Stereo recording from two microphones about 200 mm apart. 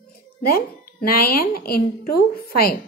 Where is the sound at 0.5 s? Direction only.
50° left (ahead or behind).